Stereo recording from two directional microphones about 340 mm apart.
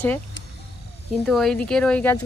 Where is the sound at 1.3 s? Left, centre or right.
Centre.